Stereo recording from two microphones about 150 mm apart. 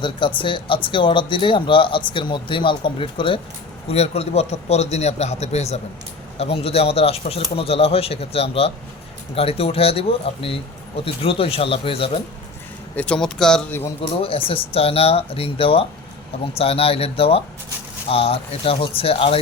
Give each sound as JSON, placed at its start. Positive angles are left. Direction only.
{"t": 0.0, "sound": "a man's voice", "side_deg": 35}
{"t": 13.0, "sound": "speech", "side_deg": 5}
{"t": 14.0, "sound": "speech", "side_deg": 40}